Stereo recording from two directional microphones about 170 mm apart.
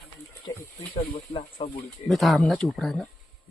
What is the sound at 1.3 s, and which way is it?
Speech, 35° left (ahead or behind).